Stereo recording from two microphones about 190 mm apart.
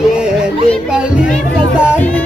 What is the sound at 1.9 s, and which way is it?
Music, 10° left (ahead or behind).